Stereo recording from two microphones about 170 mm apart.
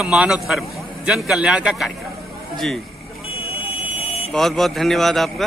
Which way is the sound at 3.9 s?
35° left (ahead or behind).